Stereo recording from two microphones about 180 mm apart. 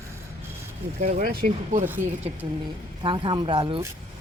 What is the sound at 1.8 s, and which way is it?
Speech, 10° right (ahead or behind).